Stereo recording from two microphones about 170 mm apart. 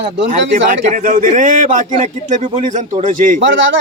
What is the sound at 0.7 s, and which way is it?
A man's voice, 50° right (ahead or behind).